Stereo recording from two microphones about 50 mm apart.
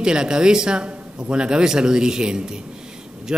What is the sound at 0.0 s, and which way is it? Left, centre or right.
A man's voice, centre.